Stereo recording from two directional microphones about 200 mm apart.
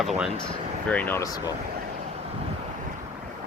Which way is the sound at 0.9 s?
10° left (ahead or behind).